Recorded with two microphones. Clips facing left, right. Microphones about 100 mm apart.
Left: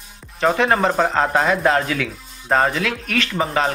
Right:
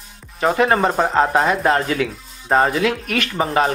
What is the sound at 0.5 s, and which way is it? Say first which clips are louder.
Speech: right 2 dB; 5° right (ahead or behind).